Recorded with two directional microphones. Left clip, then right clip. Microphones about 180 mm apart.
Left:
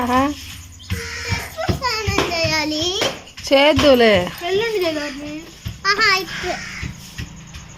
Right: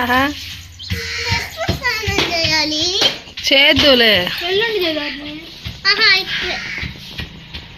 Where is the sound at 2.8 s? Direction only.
40° left (ahead or behind).